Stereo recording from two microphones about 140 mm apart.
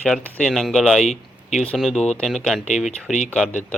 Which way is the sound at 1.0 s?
55° left (ahead or behind).